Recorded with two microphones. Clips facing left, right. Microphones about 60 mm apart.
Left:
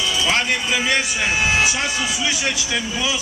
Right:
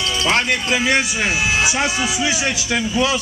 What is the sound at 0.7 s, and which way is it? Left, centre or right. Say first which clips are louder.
Speech: right 3 dB; centre.